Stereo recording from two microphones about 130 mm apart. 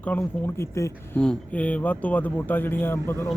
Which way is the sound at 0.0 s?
10° left (ahead or behind).